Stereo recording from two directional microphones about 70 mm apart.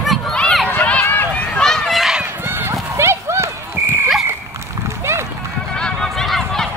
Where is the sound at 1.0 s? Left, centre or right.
Left.